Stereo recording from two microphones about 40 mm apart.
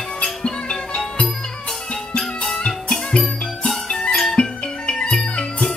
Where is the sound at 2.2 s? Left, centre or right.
Centre.